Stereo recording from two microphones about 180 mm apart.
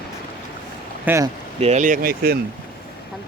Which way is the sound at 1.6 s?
40° right (ahead or behind).